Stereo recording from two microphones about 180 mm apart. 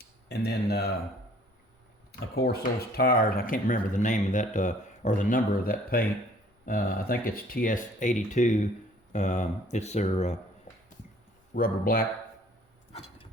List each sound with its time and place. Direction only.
0.0 s a sound: 65° left (ahead or behind)
2.1 s speech: 60° left (ahead or behind); by 10.3 s 40° left (ahead or behind)
11.5 s speech: 55° left (ahead or behind)